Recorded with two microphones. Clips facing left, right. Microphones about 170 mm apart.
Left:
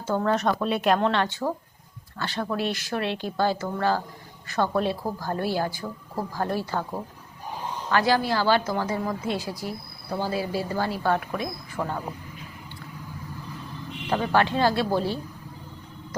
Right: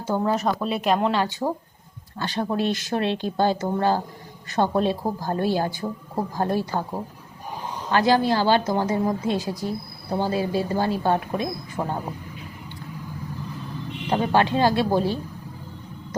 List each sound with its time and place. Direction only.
0.0 s speech: 15° right (ahead or behind)
14.3 s speech: 20° right (ahead or behind)